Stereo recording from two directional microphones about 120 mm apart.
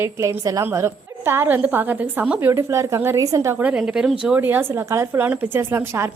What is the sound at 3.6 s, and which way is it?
Speech, 10° right (ahead or behind).